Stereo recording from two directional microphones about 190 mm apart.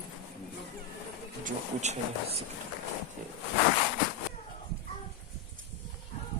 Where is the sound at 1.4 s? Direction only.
40° right (ahead or behind).